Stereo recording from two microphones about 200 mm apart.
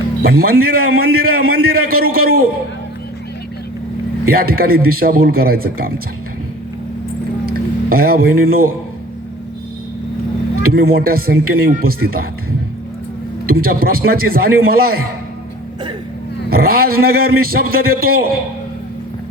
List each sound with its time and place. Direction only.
0.2 s a man's voice: 50° right (ahead or behind)
4.3 s a man's voice: 50° right (ahead or behind)
7.4 s music: 45° right (ahead or behind)
10.8 s a man's voice: 50° right (ahead or behind)
13.5 s a man's voice: 50° right (ahead or behind)
16.5 s a man's voice: 50° right (ahead or behind)